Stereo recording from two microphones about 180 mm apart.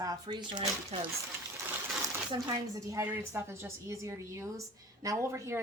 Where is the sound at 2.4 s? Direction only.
20° right (ahead or behind).